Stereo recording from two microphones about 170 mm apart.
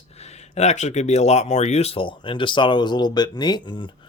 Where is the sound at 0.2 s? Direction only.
40° left (ahead or behind).